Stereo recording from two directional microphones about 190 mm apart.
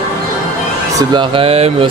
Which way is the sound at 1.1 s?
25° right (ahead or behind).